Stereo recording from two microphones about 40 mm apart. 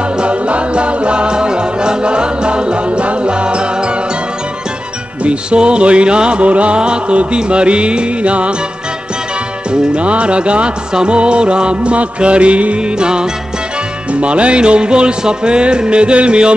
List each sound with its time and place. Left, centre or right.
0.2 s music: right
5.2 s music: right
9.7 s music: right